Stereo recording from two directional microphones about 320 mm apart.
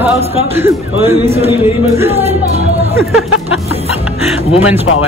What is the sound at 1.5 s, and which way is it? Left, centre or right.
Speech, centre.